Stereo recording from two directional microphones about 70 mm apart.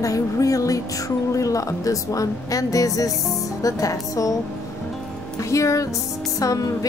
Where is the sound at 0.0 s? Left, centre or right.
Left.